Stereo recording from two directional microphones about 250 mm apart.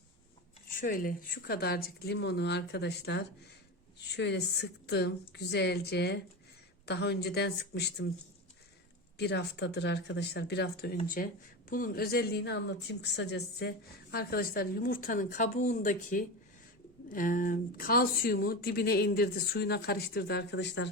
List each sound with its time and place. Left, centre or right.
0.8 s a woman's voice: left
9.1 s a woman's voice: left